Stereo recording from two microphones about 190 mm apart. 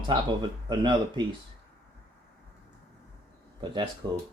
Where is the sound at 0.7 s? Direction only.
25° right (ahead or behind).